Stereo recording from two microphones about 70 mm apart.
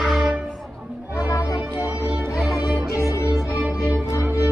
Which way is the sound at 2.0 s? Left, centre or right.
Right.